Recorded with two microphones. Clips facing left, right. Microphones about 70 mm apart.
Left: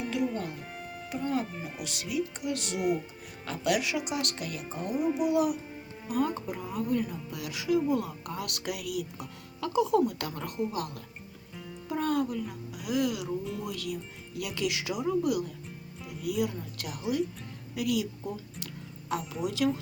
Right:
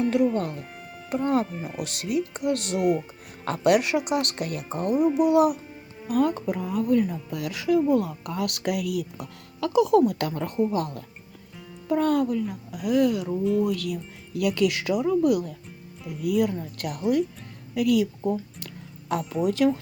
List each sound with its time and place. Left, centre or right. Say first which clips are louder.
0.1 s speech: right 8 dB; right
9.6 s speech: right 6 dB; right
11.9 s speech: right 7 dB; right
13.4 s speech: right 13 dB; centre
13.7 s speech: right 8 dB; right
18.6 s music: right 1 dB; right
19.5 s speech: right 6 dB; right